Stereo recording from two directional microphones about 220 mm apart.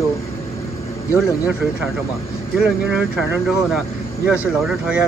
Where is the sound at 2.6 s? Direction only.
5° right (ahead or behind).